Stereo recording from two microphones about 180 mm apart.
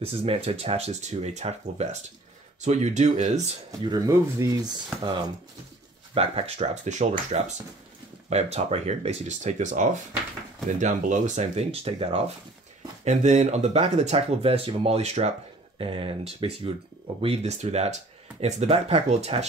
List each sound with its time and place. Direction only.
0.0 s speech: 30° right (ahead or behind)
3.9 s speech: 20° right (ahead or behind)
6.1 s speech: 35° right (ahead or behind)